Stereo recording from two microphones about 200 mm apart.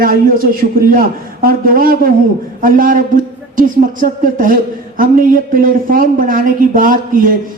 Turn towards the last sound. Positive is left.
turn(degrees=-45)  # may be behind; listen again after turning